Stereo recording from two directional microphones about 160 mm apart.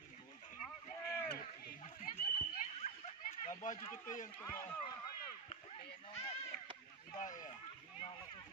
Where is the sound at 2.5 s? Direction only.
45° left (ahead or behind).